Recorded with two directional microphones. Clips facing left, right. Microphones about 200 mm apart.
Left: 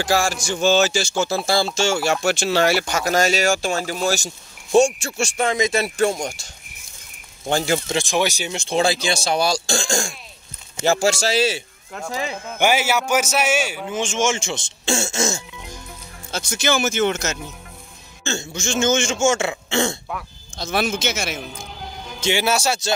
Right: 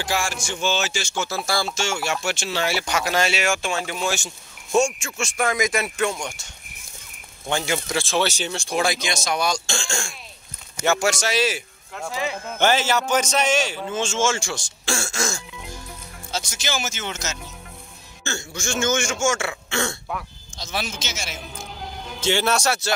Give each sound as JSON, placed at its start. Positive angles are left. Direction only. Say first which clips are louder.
{"t": 0.0, "sound": "speech", "louder": "left 6 dB", "side_deg": 40}
{"t": 5.9, "sound": "speech", "louder": "left 5 dB", "side_deg": 35}
{"t": 7.9, "sound": "a man's voice", "louder": "left 2 dB", "side_deg": 15}
{"t": 12.5, "sound": "a man's voice", "louder": "left 1 dB", "side_deg": 10}
{"t": 15.5, "sound": "music", "louder": "even", "side_deg": 0}
{"t": 16.3, "sound": "speech", "louder": "left 6 dB", "side_deg": 55}
{"t": 18.2, "sound": "a man's voice", "louder": "left 4 dB", "side_deg": 25}
{"t": 20.5, "sound": "speech", "louder": "left 8 dB", "side_deg": 55}
{"t": 21.5, "sound": "music", "louder": "left 1 dB", "side_deg": 0}
{"t": 22.2, "sound": "a man's voice", "louder": "left 1 dB", "side_deg": 15}